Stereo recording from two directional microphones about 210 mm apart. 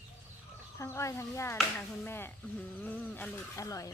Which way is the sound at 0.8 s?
15° left (ahead or behind).